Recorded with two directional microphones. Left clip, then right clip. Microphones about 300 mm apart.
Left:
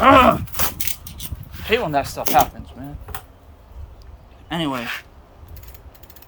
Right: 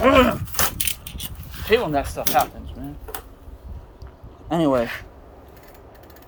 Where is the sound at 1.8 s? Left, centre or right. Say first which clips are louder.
Left 2 dB; left.